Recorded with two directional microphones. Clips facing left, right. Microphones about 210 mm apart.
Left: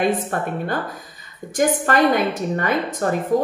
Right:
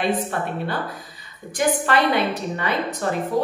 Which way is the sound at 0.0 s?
45° left (ahead or behind).